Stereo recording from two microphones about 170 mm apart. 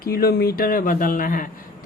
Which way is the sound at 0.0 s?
65° left (ahead or behind).